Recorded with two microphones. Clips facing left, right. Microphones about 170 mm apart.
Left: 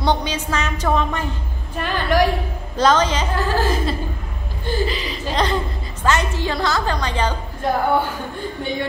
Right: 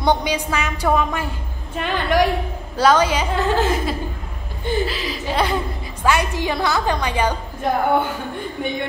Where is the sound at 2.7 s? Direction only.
10° right (ahead or behind).